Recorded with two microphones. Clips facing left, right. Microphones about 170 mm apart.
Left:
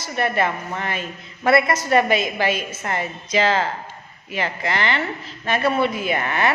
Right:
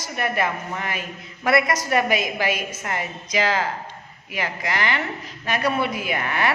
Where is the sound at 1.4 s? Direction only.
25° left (ahead or behind).